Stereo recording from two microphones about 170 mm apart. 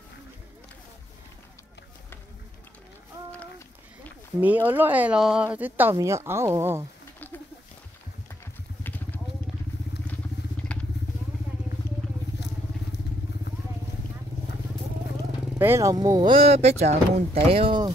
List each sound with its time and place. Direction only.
3.3 s run: 10° left (ahead or behind)
4.4 s speech: 10° right (ahead or behind)
8.8 s vehicle: 10° left (ahead or behind)
10.7 s vehicle: 5° left (ahead or behind)
15.5 s speech: 15° right (ahead or behind)